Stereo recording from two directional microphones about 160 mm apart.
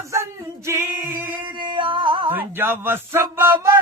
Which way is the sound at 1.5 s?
30° right (ahead or behind).